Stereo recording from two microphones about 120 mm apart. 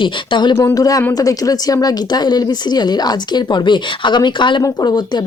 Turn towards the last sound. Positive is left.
turn(degrees=35)  # may be behind; listen again after turning